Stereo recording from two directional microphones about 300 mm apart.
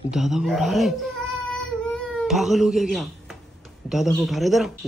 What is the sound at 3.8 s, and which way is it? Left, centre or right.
Speech, centre.